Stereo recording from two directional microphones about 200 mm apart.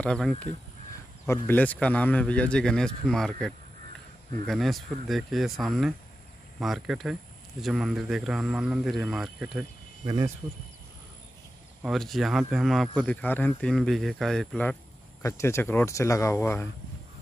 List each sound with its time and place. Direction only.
0.0 s speech: 5° left (ahead or behind)
10.0 s speech: 20° right (ahead or behind)
11.8 s speech: centre (ahead or behind)